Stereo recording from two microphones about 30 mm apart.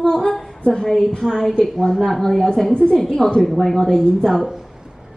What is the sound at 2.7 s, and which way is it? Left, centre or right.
Speech, left.